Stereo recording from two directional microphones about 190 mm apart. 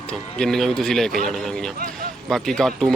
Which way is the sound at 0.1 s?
5° left (ahead or behind).